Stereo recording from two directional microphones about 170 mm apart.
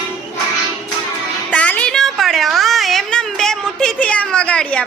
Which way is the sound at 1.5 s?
5° left (ahead or behind).